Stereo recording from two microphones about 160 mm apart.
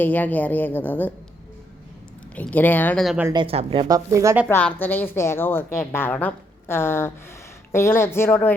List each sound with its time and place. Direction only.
0.0 s a woman's voice: 10° left (ahead or behind)
2.3 s a woman's voice: 10° left (ahead or behind)
3.3 s a woman's voice: 35° right (ahead or behind); by 4.4 s 20° right (ahead or behind)
4.4 s a woman's voice: 10° left (ahead or behind)